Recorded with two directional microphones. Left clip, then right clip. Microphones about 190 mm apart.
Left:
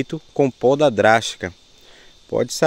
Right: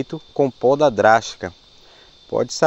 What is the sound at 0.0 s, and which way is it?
Speech, 45° left (ahead or behind).